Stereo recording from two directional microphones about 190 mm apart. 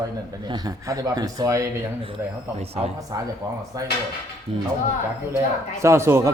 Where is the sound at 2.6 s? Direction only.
35° right (ahead or behind).